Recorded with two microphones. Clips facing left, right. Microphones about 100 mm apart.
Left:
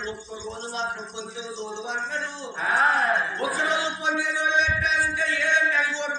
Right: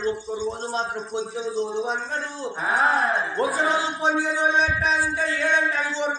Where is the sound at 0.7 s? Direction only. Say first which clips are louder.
Right 4 dB; 45° right (ahead or behind).